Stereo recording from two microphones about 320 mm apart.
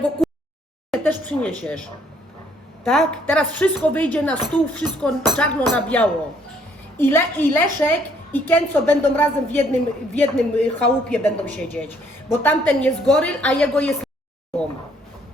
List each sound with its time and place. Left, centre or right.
0.2 s a sound: centre
0.9 s speech: centre
2.8 s a woman's voice: centre